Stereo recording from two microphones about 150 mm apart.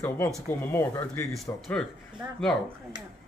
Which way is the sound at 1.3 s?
5° left (ahead or behind).